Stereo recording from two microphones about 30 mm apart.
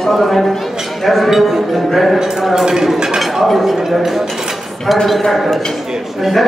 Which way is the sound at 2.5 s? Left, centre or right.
Centre.